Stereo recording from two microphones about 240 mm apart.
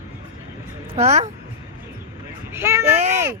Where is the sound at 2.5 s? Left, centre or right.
Centre.